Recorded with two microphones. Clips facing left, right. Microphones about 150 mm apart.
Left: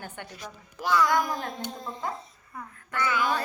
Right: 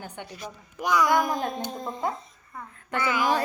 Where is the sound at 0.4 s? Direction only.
15° right (ahead or behind).